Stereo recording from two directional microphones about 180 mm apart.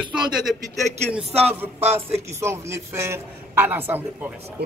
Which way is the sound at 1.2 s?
35° right (ahead or behind).